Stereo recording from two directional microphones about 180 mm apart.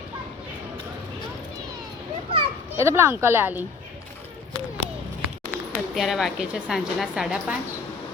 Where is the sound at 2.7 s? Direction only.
15° right (ahead or behind).